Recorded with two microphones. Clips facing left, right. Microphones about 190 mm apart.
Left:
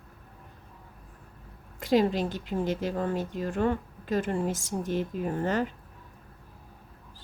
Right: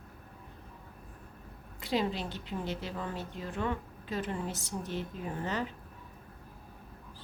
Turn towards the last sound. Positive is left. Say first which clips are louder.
# left 7 dB
turn(degrees=45)  # may be behind; listen again after turning